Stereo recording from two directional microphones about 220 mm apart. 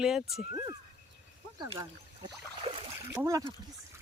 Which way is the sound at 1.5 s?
20° right (ahead or behind).